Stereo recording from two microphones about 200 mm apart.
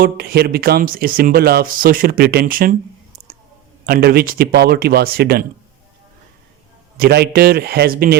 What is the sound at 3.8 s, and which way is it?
Speech, 50° right (ahead or behind).